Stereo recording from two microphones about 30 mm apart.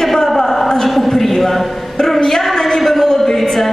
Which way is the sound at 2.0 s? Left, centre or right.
Left.